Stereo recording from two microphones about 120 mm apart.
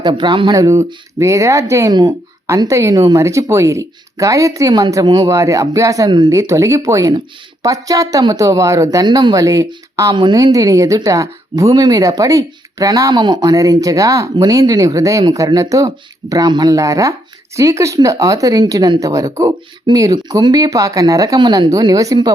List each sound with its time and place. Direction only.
0.0 s speech: 40° right (ahead or behind)
1.9 s speech: 35° right (ahead or behind)
2.5 s speech: 25° right (ahead or behind)